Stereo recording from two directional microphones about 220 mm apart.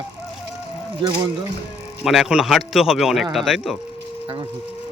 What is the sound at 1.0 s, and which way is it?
Speech, 25° right (ahead or behind).